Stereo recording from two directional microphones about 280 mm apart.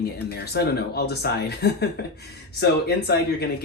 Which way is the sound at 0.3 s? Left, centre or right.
Left.